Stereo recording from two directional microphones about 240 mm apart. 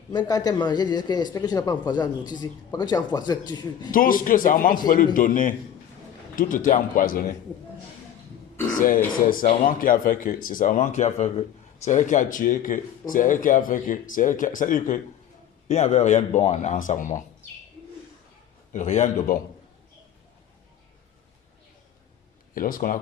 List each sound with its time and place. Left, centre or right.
0.1 s a man's voice: centre
3.9 s speech: left
9.2 s speech: left
18.7 s speech: left
22.5 s speech: left